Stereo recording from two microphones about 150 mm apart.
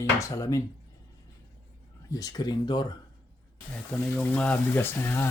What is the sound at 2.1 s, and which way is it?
Speech, 25° left (ahead or behind).